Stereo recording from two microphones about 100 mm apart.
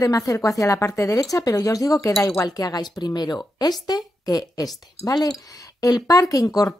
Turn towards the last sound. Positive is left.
turn(degrees=40)  # may be behind; listen again after turning